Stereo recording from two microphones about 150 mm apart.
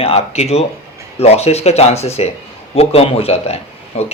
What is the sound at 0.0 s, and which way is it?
Speech, 40° left (ahead or behind).